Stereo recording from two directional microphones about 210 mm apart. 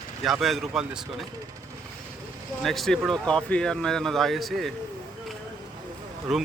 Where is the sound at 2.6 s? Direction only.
Centre (ahead or behind).